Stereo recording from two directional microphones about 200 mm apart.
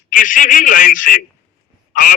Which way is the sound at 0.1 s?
40° left (ahead or behind).